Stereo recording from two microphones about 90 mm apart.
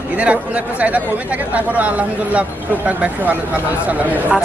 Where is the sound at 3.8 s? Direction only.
15° right (ahead or behind).